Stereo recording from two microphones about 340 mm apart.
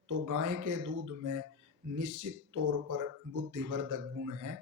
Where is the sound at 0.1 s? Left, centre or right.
Right.